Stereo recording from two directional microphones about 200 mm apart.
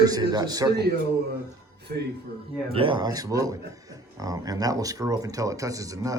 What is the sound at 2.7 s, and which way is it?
Speech, 25° right (ahead or behind).